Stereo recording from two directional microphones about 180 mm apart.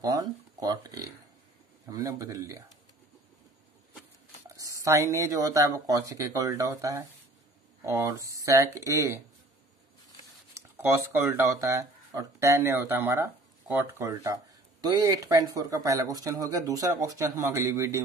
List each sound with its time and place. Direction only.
0.0 s speech: 20° right (ahead or behind)
4.6 s speech: 20° right (ahead or behind)
11.1 s speech: 15° right (ahead or behind)